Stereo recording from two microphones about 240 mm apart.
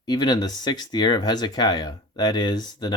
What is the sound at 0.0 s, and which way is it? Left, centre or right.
Speech, centre.